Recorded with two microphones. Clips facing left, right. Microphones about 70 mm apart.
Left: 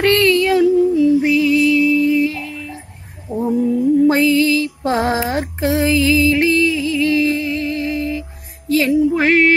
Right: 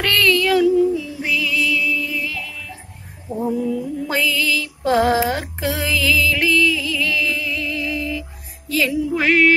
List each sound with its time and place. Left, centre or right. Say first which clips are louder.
0.0 s music: left 4 dB; left